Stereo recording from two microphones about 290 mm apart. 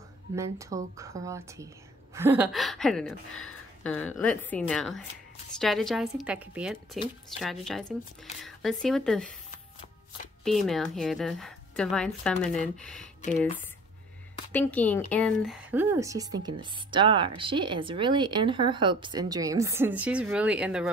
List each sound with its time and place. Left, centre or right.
0.4 s a woman's voice: centre
10.4 s a woman's voice: centre
14.5 s a woman's voice: centre